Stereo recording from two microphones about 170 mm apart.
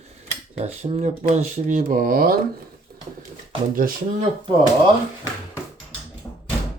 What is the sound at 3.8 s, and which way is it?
Speech, 55° right (ahead or behind).